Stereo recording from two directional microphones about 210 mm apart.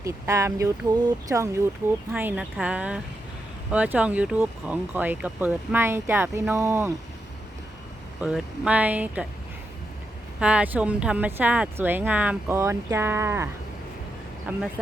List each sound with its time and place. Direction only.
0.0 s speech: 15° right (ahead or behind)
8.2 s speech: 5° right (ahead or behind)
10.4 s speech: 5° right (ahead or behind)